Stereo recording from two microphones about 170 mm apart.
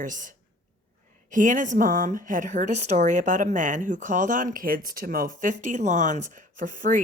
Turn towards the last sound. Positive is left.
turn(degrees=-50)  # may be behind; listen again after turning